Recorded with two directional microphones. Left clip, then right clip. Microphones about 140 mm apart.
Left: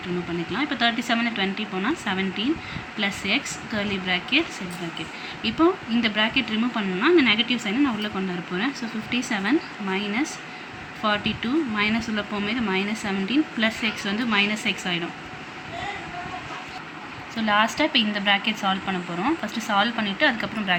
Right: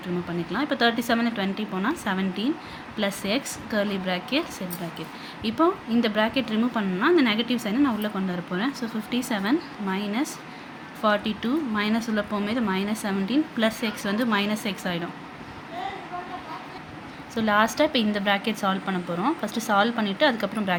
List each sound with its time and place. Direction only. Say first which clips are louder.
0.5 s a woman's voice: even; 90° right
17.3 s speech: even; 75° right (ahead or behind)